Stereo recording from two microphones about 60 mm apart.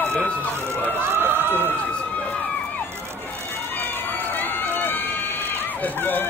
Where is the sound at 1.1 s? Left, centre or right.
Right.